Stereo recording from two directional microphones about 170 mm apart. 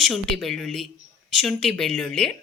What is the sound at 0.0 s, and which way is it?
Speech, centre (ahead or behind).